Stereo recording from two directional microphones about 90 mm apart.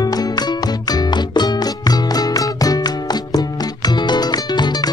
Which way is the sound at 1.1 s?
55° left (ahead or behind).